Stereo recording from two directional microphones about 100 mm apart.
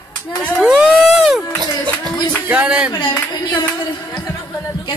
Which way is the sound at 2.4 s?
10° right (ahead or behind).